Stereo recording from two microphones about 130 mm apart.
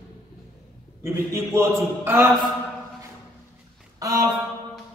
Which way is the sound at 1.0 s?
20° right (ahead or behind).